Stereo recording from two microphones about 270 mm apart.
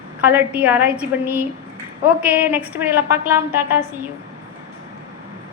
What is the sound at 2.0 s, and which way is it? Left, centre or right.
A woman's voice, centre.